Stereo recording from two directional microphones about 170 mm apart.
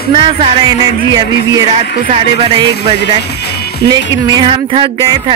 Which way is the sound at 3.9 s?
25° right (ahead or behind).